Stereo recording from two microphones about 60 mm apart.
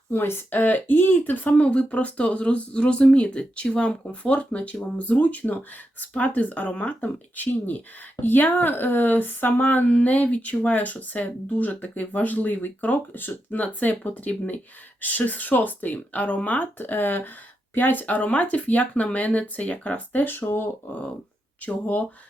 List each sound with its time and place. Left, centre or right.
0.1 s speech: left
1.5 s speech: left
20.2 s speech: left
21.6 s speech: left